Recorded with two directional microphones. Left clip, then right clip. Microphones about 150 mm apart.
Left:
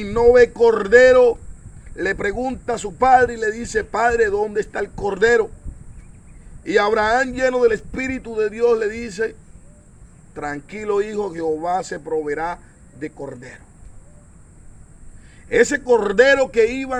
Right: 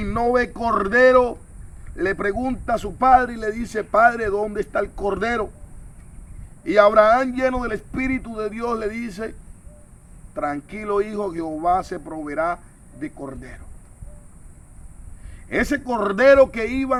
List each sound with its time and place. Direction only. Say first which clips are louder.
0.0 s a man's voice: left 8 dB; 30° right (ahead or behind)
6.7 s a man's voice: right 3 dB; 30° right (ahead or behind)
10.3 s a man's voice: right 2 dB; 25° right (ahead or behind)
15.4 s a man's voice: left 7 dB; 30° right (ahead or behind)